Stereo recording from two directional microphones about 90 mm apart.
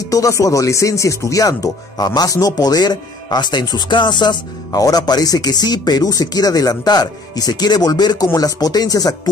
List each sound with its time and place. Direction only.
0.1 s speech: 40° left (ahead or behind)